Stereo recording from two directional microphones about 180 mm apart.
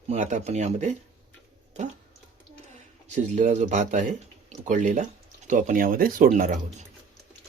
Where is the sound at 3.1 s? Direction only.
40° right (ahead or behind).